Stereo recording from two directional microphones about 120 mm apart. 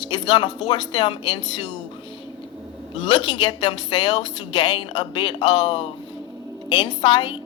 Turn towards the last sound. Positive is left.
turn(degrees=45)  # may be behind; listen again after turning